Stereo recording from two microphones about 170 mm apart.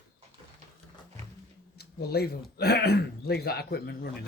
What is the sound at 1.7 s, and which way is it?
A man's voice, 70° left (ahead or behind).